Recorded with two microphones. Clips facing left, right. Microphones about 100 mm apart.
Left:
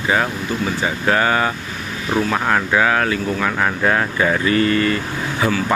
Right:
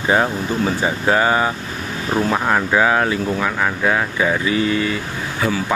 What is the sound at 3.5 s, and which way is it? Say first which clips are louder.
Speech: left 1 dB; centre (ahead or behind).